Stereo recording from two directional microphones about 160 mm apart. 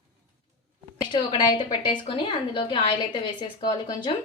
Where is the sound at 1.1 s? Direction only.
30° left (ahead or behind).